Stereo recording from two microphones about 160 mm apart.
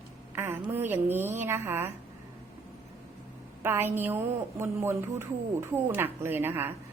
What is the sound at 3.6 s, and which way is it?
A woman's voice, 15° right (ahead or behind).